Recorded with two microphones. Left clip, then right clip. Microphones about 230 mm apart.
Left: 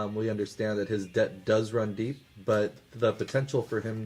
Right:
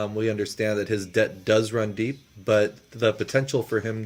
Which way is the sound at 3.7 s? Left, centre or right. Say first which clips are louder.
Right 6 dB; right.